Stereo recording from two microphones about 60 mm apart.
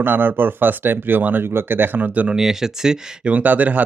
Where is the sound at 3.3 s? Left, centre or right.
Right.